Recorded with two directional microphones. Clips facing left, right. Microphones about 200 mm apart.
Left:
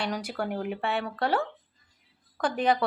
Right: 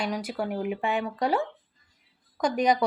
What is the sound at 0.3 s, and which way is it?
Speech, 5° right (ahead or behind).